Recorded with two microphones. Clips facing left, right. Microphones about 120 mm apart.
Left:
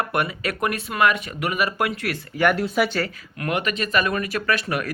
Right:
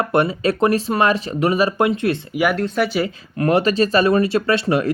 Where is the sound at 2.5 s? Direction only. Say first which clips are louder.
Right 2 dB; 5° left (ahead or behind).